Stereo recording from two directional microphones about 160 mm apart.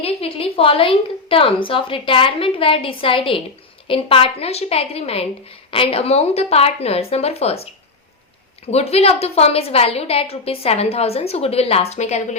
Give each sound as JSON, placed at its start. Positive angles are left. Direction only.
{"t": 0.0, "sound": "a woman's voice", "side_deg": 40}
{"t": 8.7, "sound": "a woman's voice", "side_deg": 40}